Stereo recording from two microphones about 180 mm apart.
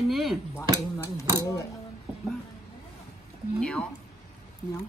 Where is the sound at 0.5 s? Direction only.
15° left (ahead or behind).